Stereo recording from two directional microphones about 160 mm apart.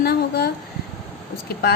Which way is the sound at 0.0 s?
80° left.